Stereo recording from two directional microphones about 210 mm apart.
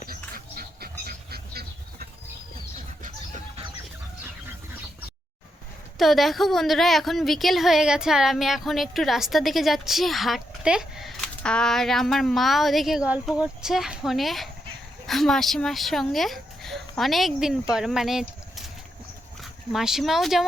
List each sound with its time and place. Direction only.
0.1 s bird: 45° right (ahead or behind)
6.0 s a woman's voice: centre (ahead or behind)